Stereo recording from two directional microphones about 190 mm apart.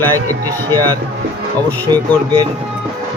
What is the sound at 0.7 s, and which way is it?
Speech, 20° right (ahead or behind).